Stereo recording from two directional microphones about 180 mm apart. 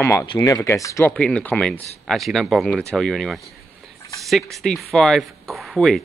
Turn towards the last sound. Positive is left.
turn(degrees=0)  # may be behind; listen again after turning